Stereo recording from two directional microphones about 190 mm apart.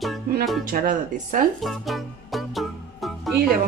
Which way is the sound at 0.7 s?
45° right (ahead or behind).